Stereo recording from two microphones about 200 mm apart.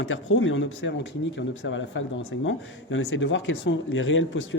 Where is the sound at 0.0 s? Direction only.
75° left (ahead or behind).